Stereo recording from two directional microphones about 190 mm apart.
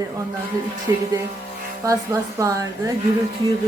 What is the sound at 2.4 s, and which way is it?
Speech, 15° right (ahead or behind).